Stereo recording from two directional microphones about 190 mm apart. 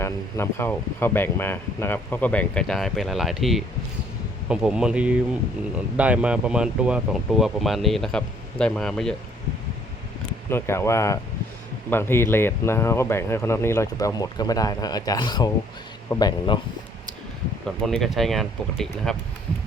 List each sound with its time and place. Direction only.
0.0 s speech: 15° left (ahead or behind)
10.5 s speech: 15° left (ahead or behind)
17.8 s speech: centre (ahead or behind)